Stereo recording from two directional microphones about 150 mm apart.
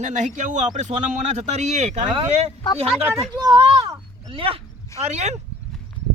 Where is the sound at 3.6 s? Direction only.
40° right (ahead or behind).